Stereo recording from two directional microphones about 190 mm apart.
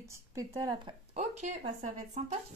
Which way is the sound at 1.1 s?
35° right (ahead or behind).